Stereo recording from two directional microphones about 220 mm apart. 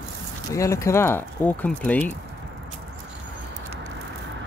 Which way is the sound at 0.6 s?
15° left (ahead or behind).